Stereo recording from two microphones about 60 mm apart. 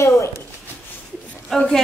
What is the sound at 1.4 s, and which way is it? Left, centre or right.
Speech, centre.